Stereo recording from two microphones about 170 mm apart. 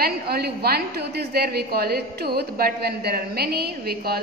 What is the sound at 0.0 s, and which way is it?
A woman's voice, 70° right (ahead or behind).